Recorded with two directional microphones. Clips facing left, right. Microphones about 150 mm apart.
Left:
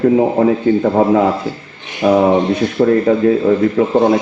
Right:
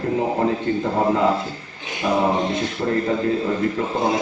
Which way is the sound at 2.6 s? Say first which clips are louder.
Left 9 dB; 60° left (ahead or behind).